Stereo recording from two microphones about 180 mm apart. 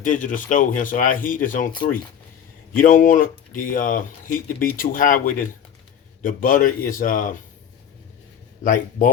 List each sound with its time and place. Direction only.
0.0 s speech: 45° left (ahead or behind)
2.7 s speech: 50° left (ahead or behind)
8.6 s speech: 45° left (ahead or behind)